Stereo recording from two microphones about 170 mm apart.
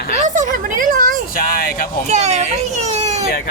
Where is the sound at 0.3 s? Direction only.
50° right (ahead or behind).